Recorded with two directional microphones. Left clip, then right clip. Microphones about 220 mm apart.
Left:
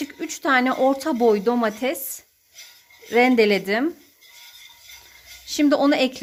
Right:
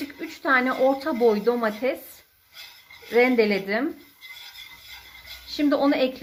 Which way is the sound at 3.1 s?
55° left (ahead or behind).